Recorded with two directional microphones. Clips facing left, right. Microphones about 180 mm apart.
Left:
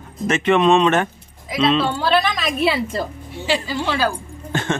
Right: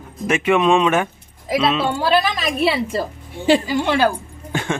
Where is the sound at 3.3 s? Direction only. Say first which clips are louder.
Right 7 dB; 50° right (ahead or behind).